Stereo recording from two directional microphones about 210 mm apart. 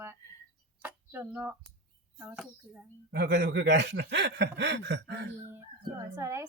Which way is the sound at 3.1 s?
55° right (ahead or behind).